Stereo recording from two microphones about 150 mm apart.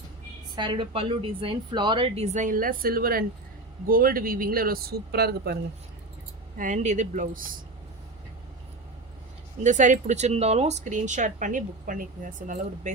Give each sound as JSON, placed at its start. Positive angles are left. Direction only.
{"t": 0.5, "sound": "a woman's voice", "side_deg": -30}
{"t": 2.1, "sound": "speech", "side_deg": -50}
{"t": 6.6, "sound": "speech", "side_deg": -55}
{"t": 9.6, "sound": "speech", "side_deg": -55}